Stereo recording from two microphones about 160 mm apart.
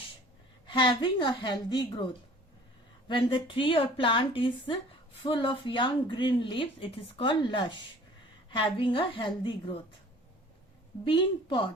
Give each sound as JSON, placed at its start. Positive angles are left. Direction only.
{"t": 0.7, "sound": "a woman's voice", "side_deg": 30}
{"t": 3.1, "sound": "speech", "side_deg": 30}
{"t": 11.0, "sound": "speech", "side_deg": 30}